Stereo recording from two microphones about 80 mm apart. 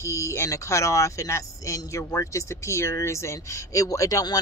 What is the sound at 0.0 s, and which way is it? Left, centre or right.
Speech, left.